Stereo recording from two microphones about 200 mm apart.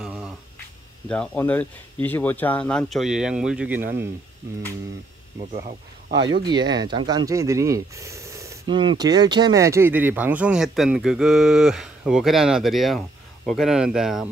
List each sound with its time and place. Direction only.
0.0 s a sound: 5° right (ahead or behind)
1.0 s speech: 5° left (ahead or behind); by 4.1 s 10° right (ahead or behind)
5.5 s speech: 40° right (ahead or behind)
6.2 s speech: 20° right (ahead or behind); by 14.2 s centre (ahead or behind)